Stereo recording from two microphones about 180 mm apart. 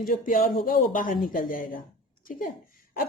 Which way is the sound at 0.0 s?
50° left (ahead or behind).